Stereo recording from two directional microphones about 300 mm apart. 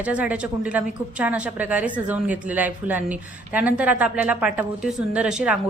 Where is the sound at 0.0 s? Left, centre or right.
Centre.